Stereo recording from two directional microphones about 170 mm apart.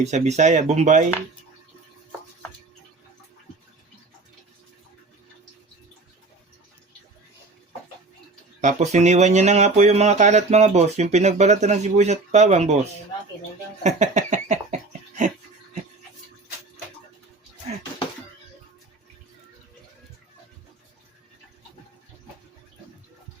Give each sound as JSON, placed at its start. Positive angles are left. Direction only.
{"t": 0.0, "sound": "speech", "side_deg": -40}
{"t": 8.6, "sound": "speech", "side_deg": -40}
{"t": 13.8, "sound": "a sound", "side_deg": -45}